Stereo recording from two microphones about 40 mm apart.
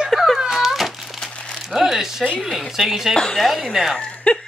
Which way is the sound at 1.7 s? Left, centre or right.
Centre.